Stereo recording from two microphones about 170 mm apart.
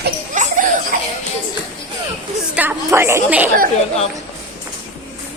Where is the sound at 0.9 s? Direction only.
55° right (ahead or behind).